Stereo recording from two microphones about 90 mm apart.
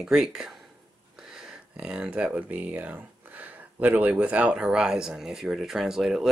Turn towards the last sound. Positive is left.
turn(degrees=-5)  # may be behind; listen again after turning